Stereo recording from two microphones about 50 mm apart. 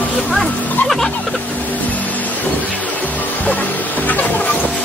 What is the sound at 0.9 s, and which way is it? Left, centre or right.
Music, centre.